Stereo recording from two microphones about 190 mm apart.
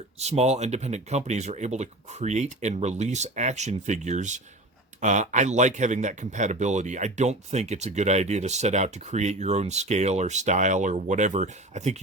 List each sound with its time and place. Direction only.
0.2 s a man's voice: 35° right (ahead or behind)